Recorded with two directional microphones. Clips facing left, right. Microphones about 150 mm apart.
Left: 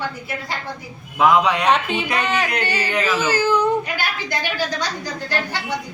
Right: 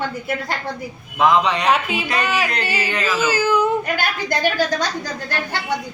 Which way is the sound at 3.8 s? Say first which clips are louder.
Right 4 dB; 45° right (ahead or behind).